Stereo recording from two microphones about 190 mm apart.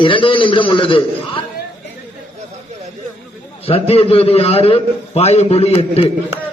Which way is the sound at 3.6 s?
30° left (ahead or behind).